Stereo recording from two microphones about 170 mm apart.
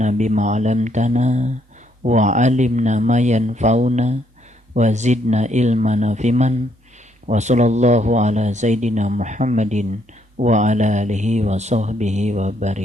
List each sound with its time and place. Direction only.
0.0 s speech: 45° right (ahead or behind)